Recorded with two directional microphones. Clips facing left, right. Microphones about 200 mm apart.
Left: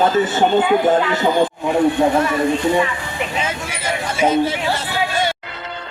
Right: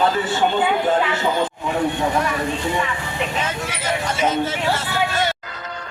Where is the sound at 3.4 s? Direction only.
10° left (ahead or behind).